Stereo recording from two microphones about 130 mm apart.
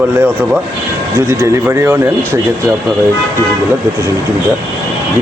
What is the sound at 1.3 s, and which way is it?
A man's voice, 20° right (ahead or behind).